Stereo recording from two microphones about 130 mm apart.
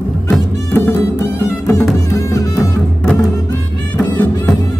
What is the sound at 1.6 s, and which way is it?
Music, 20° left (ahead or behind).